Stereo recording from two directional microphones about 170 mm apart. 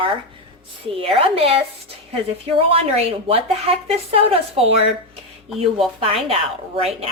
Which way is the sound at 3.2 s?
35° right (ahead or behind).